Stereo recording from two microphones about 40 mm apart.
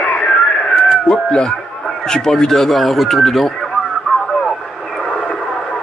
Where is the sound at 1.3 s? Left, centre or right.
Left; by 3.5 s centre.